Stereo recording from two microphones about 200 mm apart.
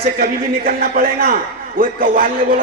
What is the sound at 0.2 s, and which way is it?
A man's voice, 50° right (ahead or behind).